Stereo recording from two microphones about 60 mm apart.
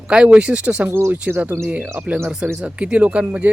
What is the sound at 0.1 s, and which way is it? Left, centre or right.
Speech, centre.